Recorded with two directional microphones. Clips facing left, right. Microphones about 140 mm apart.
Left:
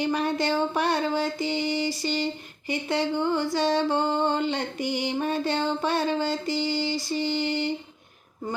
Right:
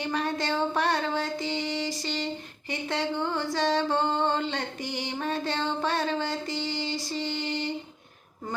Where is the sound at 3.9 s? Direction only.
15° left (ahead or behind).